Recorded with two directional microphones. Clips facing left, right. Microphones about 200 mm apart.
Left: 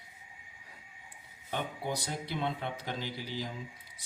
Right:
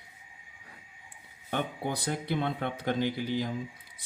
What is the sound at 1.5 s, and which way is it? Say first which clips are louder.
Speech: right 3 dB; 55° right (ahead or behind).